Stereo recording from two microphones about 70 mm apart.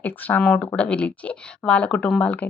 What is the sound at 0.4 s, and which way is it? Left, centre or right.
A woman's voice, centre.